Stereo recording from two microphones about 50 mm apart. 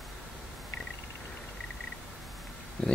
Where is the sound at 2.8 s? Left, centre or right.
Centre.